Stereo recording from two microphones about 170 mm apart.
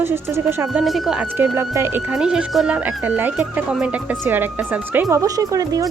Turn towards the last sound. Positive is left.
turn(degrees=-20)  # may be behind; listen again after turning